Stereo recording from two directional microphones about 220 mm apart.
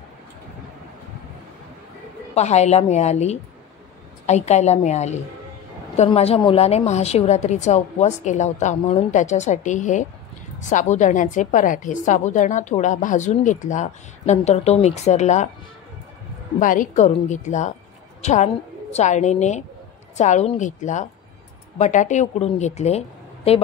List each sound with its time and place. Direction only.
2.3 s a woman's voice: 30° left (ahead or behind)
16.5 s a woman's voice: 35° left (ahead or behind)